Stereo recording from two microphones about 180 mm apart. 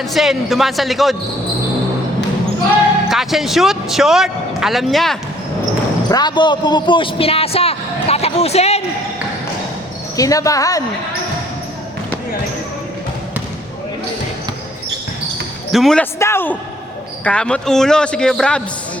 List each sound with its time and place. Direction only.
0.0 s speech: centre (ahead or behind)
3.1 s speech: centre (ahead or behind)
6.1 s a man's voice: 25° left (ahead or behind)
10.2 s speech: 20° left (ahead or behind)
15.7 s speech: centre (ahead or behind)
16.1 s a man's voice: 15° left (ahead or behind)